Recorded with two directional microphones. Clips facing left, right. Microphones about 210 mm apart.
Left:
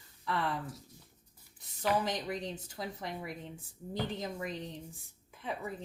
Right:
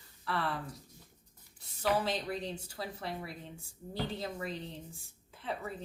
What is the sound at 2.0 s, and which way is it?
Speech, 15° left (ahead or behind).